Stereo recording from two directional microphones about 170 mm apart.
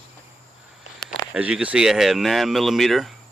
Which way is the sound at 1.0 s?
5° right (ahead or behind).